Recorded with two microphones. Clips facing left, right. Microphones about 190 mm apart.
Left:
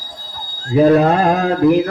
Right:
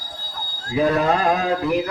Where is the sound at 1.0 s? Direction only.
50° left (ahead or behind).